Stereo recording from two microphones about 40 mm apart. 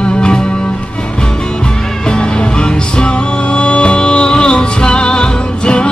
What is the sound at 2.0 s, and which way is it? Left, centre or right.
Music, left.